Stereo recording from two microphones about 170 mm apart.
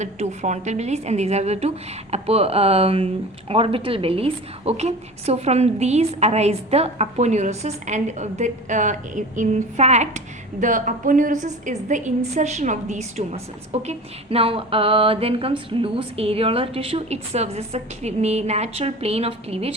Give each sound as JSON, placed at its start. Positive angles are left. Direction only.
{"t": 0.0, "sound": "a woman's voice", "side_deg": -40}